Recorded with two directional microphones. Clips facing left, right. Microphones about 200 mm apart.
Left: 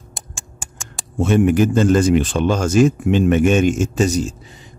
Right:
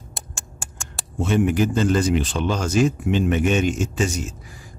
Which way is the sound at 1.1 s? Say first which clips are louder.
Left 5 dB; 50° left (ahead or behind).